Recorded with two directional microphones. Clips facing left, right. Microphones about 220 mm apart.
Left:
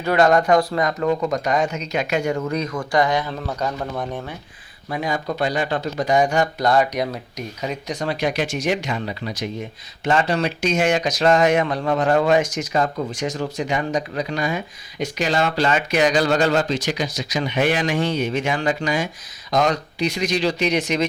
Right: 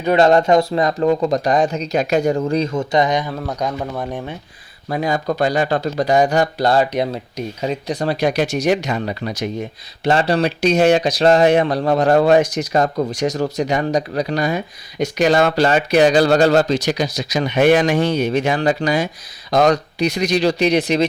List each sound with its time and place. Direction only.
0.0 s speech: 25° right (ahead or behind)
4.9 s speech: 40° right (ahead or behind)
10.0 s speech: 35° right (ahead or behind)